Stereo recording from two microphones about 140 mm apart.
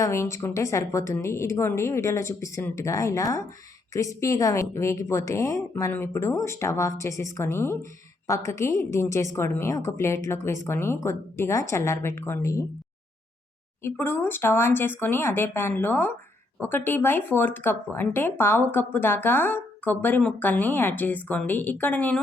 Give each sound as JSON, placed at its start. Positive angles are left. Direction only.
{"t": 0.0, "sound": "a woman's voice", "side_deg": 20}
{"t": 13.8, "sound": "speech", "side_deg": 15}